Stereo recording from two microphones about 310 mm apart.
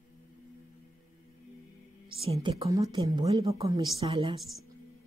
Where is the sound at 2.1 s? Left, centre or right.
Centre.